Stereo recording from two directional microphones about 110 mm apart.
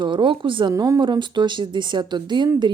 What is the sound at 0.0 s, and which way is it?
Speech, 45° right (ahead or behind).